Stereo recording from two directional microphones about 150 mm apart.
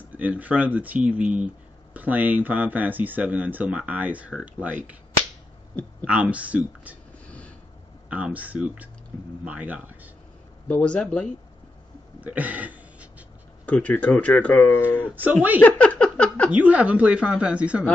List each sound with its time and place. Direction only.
0.1 s speech: 10° right (ahead or behind)
6.0 s speech: 10° right (ahead or behind)
7.2 s a sound: 10° left (ahead or behind)
8.1 s speech: 10° right (ahead or behind)
10.7 s speech: 10° left (ahead or behind)
12.2 s a sound: 10° right (ahead or behind)
13.7 s speech: 10° left (ahead or behind)
16.4 s speech: 10° right (ahead or behind)